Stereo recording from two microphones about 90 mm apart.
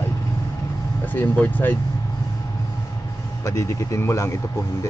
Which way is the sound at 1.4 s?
20° left (ahead or behind).